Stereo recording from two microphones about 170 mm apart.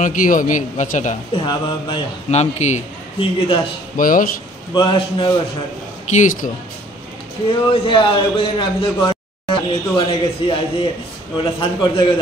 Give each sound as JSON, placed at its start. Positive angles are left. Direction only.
{"t": 0.0, "sound": "a man's voice", "side_deg": 50}
{"t": 1.3, "sound": "a man's voice", "side_deg": 30}
{"t": 2.3, "sound": "a man's voice", "side_deg": 40}
{"t": 3.9, "sound": "a man's voice", "side_deg": 55}
{"t": 4.7, "sound": "a man's voice", "side_deg": 25}
{"t": 6.0, "sound": "a man's voice", "side_deg": 50}
{"t": 7.7, "sound": "a man's voice", "side_deg": 30}